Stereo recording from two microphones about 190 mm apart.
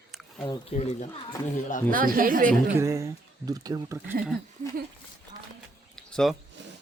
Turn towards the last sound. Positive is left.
turn(degrees=5)  # may be behind; listen again after turning